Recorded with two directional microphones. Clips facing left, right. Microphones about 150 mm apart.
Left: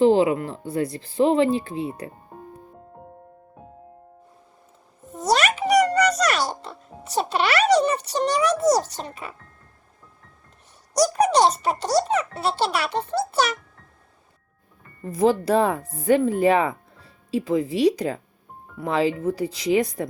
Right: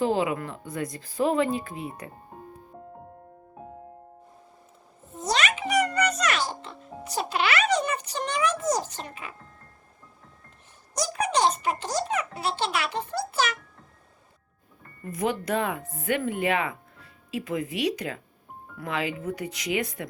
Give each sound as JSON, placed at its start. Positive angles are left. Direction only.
{"t": 0.0, "sound": "speech", "side_deg": 30}
{"t": 5.4, "sound": "music", "side_deg": 35}
{"t": 10.9, "sound": "speech", "side_deg": 45}
{"t": 15.0, "sound": "speech", "side_deg": 30}